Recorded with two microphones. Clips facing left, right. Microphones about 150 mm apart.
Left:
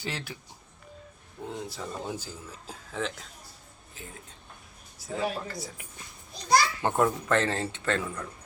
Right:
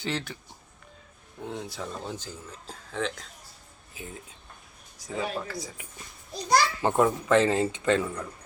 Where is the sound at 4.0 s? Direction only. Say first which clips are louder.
Right 4 dB; 10° right (ahead or behind).